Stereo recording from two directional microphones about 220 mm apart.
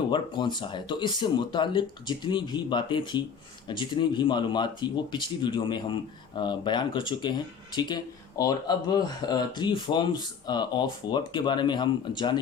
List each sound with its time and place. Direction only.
0.1 s speech: 20° left (ahead or behind)